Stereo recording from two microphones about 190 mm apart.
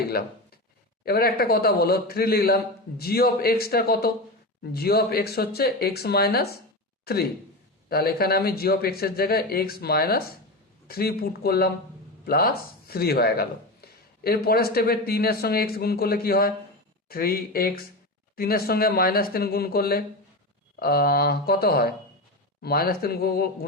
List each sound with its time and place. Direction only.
0.1 s speech: 55° left (ahead or behind)